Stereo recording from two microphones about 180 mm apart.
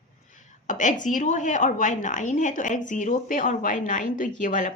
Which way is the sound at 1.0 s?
45° left (ahead or behind).